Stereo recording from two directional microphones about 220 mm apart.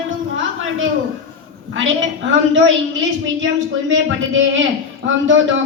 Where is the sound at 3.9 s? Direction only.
60° right (ahead or behind).